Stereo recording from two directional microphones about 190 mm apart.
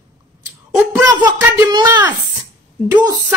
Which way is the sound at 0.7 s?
15° right (ahead or behind).